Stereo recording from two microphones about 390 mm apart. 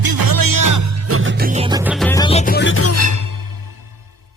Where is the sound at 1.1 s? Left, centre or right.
Right.